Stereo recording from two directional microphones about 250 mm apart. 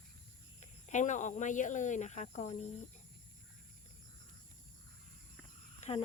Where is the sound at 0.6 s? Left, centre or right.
Left.